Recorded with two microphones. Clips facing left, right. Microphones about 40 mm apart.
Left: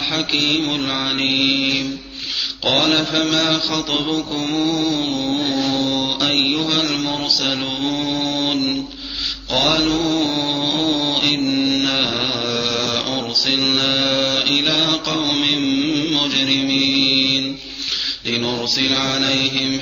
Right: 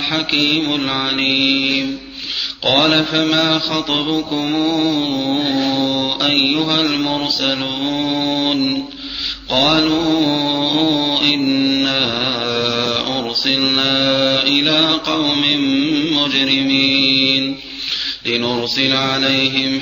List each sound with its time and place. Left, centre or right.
0.1 s mantra: centre
16.7 s mantra: right
17.0 s mantra: right